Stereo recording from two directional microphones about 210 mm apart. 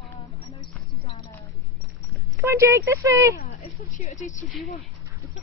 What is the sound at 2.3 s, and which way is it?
Speech, 15° right (ahead or behind).